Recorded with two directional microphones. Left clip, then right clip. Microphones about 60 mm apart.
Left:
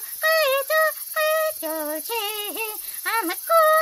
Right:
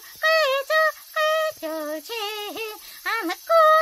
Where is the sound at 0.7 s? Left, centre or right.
Centre.